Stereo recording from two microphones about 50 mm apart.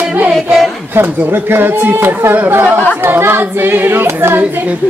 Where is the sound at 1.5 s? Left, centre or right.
Right.